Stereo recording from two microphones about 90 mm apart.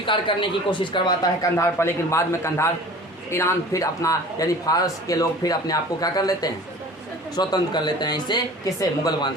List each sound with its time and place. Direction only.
0.0 s speech: 70° left (ahead or behind); by 1.5 s 50° left (ahead or behind)
1.5 s a man's voice: 30° left (ahead or behind); by 9.3 s 50° left (ahead or behind)